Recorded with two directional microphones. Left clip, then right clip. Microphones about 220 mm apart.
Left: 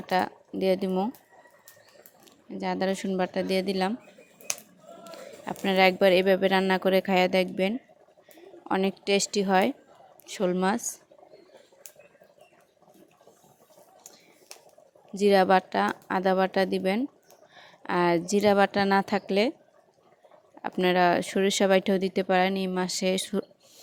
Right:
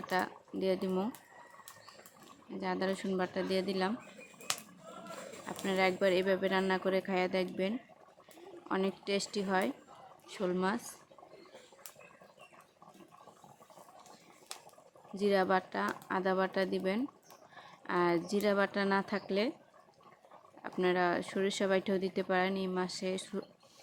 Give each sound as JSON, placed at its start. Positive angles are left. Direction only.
{"t": 0.1, "sound": "speech", "side_deg": 30}
{"t": 2.6, "sound": "speech", "side_deg": 30}
{"t": 4.5, "sound": "a sound", "side_deg": 0}
{"t": 5.5, "sound": "speech", "side_deg": 35}
{"t": 8.7, "sound": "speech", "side_deg": 30}
{"t": 15.1, "sound": "speech", "side_deg": 35}
{"t": 20.6, "sound": "speech", "side_deg": 35}